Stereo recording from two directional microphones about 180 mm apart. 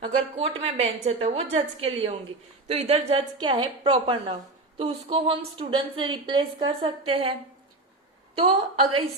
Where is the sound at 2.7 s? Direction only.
35° right (ahead or behind).